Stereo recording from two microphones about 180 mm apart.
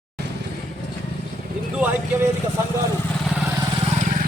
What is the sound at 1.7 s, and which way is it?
Vehicle, 10° right (ahead or behind).